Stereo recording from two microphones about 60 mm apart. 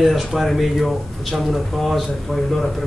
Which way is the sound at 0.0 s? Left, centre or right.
Centre.